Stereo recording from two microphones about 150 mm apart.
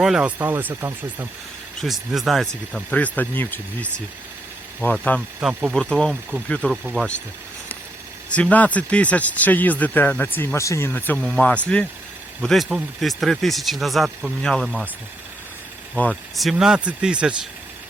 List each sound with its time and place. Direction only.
0.0 s speech: 5° right (ahead or behind)
1.8 s speech: centre (ahead or behind)
5.4 s speech: 5° right (ahead or behind)
5.7 s speech: 5° left (ahead or behind)
8.3 s speech: 10° left (ahead or behind)
16.0 s speech: 5° left (ahead or behind)